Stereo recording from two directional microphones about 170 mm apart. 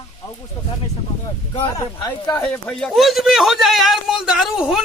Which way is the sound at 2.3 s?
5° left (ahead or behind).